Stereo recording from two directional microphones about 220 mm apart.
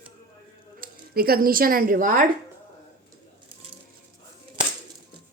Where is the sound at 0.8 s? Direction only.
45° right (ahead or behind).